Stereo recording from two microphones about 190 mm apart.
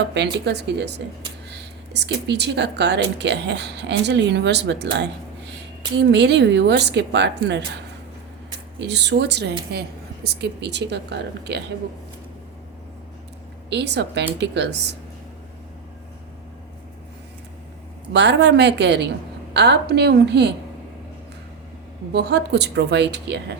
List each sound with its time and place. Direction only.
0.0 s speech: 65° right (ahead or behind)
8.8 s speech: 65° right (ahead or behind)
13.7 s speech: 65° right (ahead or behind)
18.1 s speech: 65° right (ahead or behind)
22.1 s speech: 60° right (ahead or behind)